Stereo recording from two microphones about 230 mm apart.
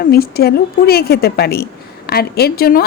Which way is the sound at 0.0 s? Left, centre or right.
Left.